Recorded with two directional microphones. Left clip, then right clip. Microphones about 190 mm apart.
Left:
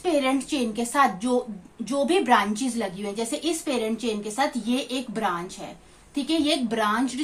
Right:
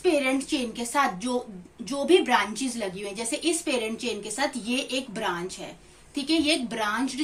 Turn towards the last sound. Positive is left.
turn(degrees=30)  # may be behind; listen again after turning